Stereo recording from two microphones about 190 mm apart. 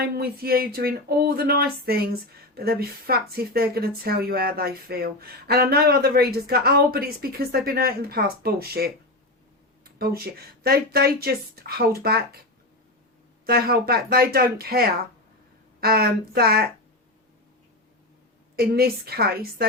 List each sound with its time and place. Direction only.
0.2 s speech: 55° right (ahead or behind)
13.4 s speech: 50° right (ahead or behind)
18.5 s speech: 55° right (ahead or behind)